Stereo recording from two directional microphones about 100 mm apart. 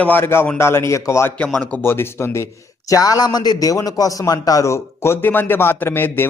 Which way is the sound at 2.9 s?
40° left (ahead or behind).